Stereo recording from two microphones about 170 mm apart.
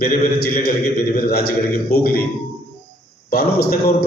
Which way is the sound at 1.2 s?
65° left (ahead or behind).